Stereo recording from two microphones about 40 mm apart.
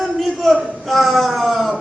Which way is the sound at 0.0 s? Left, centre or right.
Centre.